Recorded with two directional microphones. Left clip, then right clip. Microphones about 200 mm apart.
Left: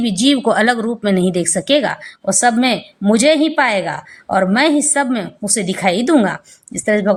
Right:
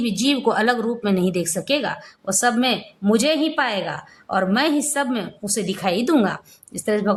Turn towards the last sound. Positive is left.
turn(degrees=15)  # may be behind; listen again after turning